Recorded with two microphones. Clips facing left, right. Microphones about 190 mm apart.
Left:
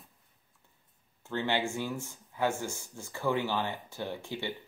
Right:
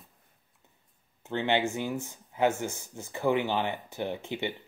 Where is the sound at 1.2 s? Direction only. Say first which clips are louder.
Right 4 dB; 20° right (ahead or behind).